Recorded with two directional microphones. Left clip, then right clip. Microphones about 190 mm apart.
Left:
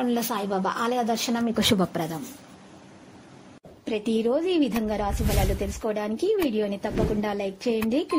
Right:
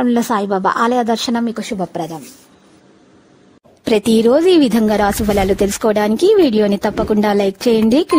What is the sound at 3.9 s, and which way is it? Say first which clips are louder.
A woman's voice: right 13 dB; 70° right (ahead or behind).